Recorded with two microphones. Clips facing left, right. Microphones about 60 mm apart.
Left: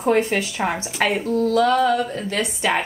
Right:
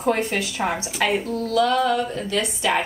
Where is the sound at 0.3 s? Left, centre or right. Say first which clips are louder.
Left 2 dB; left.